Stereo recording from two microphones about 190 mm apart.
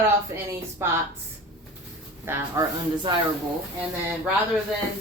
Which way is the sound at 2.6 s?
15° right (ahead or behind).